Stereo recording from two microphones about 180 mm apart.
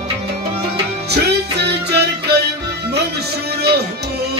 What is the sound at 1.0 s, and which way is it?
Music, 70° right (ahead or behind).